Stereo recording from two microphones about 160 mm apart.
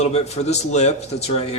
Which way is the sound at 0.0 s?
45° left (ahead or behind).